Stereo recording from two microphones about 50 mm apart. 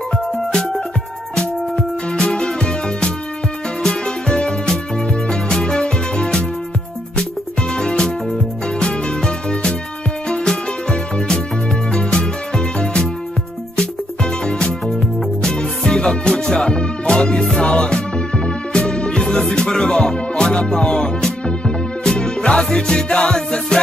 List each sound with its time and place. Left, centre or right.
0.5 s music: centre
7.7 s music: centre
14.4 s music: centre